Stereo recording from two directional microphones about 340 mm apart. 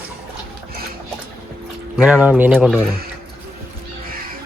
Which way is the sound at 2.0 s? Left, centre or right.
Centre.